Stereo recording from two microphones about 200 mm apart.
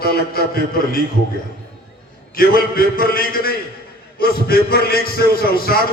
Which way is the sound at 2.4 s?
45° left (ahead or behind).